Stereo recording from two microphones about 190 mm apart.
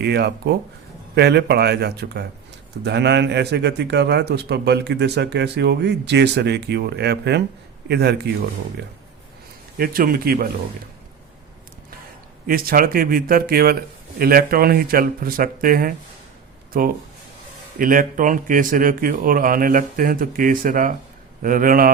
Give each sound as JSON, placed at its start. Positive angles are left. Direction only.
{"t": 0.0, "sound": "a man's voice", "side_deg": -60}
{"t": 9.7, "sound": "speech", "side_deg": -50}
{"t": 12.5, "sound": "speech", "side_deg": -50}